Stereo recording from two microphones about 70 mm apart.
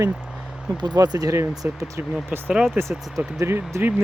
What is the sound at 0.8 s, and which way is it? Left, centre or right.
Speech, right.